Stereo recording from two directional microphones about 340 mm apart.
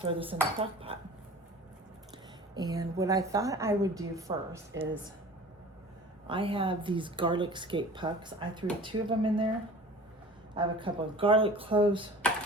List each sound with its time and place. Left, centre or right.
0.0 s speech: centre
2.6 s speech: centre
6.2 s speech: centre
10.5 s speech: centre